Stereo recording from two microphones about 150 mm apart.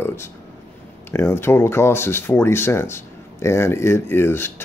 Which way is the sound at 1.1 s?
15° left (ahead or behind).